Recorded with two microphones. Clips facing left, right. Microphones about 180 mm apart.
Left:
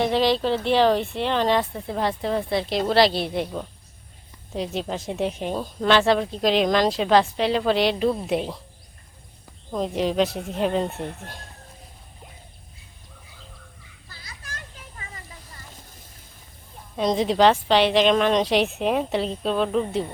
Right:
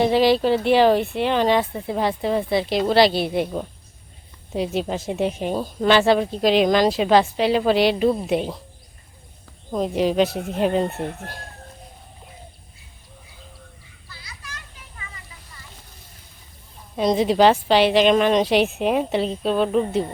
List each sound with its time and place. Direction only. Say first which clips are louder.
0.0 s speech: right 4 dB; 5° right (ahead or behind)
9.7 s speech: right 3 dB; 5° right (ahead or behind)
14.1 s children playing: right 1 dB; 45° left (ahead or behind)
17.0 s speech: right 2 dB; 5° right (ahead or behind)